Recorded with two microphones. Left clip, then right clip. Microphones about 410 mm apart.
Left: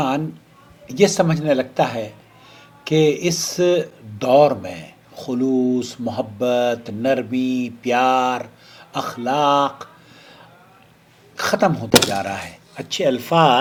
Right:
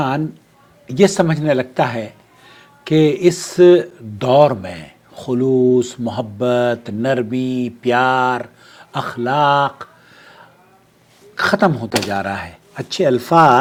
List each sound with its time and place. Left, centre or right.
0.9 s speech: right
11.3 s speech: right